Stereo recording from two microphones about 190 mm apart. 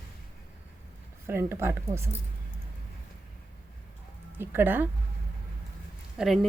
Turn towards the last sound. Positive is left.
turn(degrees=-5)  # may be behind; listen again after turning